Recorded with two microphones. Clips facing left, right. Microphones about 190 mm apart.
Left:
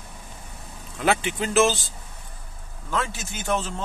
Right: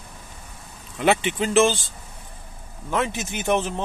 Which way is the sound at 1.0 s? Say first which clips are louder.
Right 3 dB; centre (ahead or behind).